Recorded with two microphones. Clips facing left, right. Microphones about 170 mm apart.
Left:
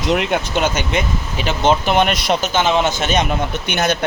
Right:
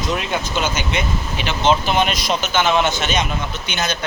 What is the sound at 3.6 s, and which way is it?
Speech, 60° left (ahead or behind).